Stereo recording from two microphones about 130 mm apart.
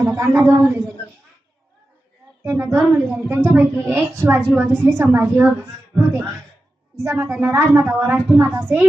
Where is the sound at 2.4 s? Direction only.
25° right (ahead or behind).